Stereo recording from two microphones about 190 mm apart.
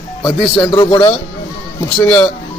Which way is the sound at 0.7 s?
25° left (ahead or behind).